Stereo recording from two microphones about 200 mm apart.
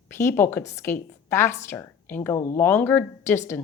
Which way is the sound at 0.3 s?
10° left (ahead or behind).